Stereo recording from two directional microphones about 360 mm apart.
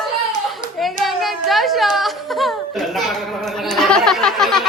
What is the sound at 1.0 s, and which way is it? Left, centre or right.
Speech, centre.